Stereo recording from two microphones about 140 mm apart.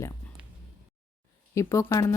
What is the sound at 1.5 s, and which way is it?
Speech, 20° left (ahead or behind).